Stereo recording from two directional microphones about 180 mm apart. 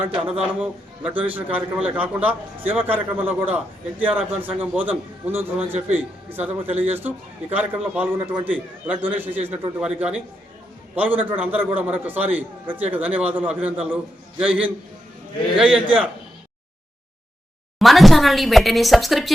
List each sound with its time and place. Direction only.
0.3 s a man's voice: 5° right (ahead or behind)
5.6 s a man's voice: 35° right (ahead or behind)
6.3 s a man's voice: 10° right (ahead or behind)
17.7 s speech: centre (ahead or behind)